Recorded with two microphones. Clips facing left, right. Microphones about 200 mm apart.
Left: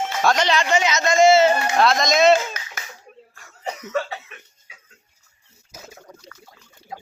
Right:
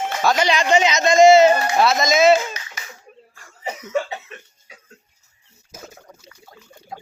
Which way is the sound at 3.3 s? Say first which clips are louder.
Even; 5° right (ahead or behind).